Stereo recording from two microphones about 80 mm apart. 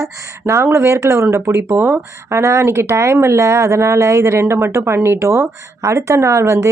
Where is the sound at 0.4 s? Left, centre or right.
Right.